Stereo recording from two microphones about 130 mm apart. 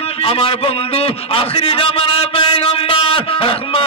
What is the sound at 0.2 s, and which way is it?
A man's voice, 45° left (ahead or behind).